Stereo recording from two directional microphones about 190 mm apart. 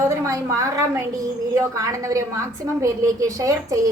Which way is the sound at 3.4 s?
15° right (ahead or behind).